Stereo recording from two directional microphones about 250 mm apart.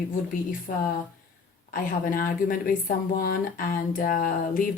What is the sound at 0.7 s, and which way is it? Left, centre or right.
Speech, left.